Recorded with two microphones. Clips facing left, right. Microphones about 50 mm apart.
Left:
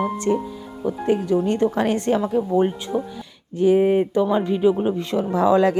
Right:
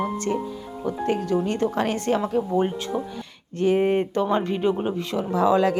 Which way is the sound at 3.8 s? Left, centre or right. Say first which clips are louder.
Left 3 dB; centre.